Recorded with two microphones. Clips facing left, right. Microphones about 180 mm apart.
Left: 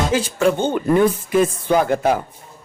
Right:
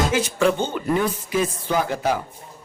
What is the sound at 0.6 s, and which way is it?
Speech, 50° left (ahead or behind).